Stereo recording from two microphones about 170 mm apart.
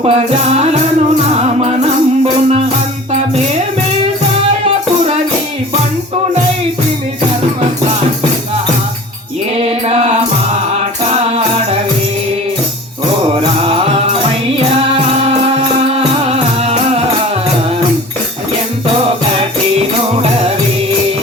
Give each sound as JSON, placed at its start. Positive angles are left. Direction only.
{"t": 0.0, "sound": "music", "side_deg": -35}
{"t": 13.3, "sound": "music", "side_deg": -35}
{"t": 15.9, "sound": "music", "side_deg": -35}